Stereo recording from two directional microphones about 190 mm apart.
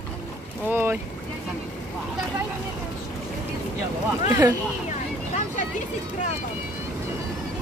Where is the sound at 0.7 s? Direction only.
10° right (ahead or behind).